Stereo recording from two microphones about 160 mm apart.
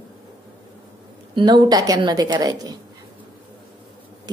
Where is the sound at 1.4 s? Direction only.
25° right (ahead or behind).